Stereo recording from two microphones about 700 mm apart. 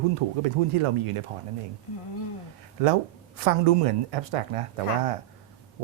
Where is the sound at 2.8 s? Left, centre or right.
Right.